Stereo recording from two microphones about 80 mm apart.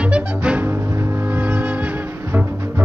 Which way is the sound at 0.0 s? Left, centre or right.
Centre.